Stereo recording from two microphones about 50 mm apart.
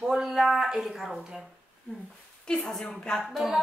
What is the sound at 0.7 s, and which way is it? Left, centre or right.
Speech, centre.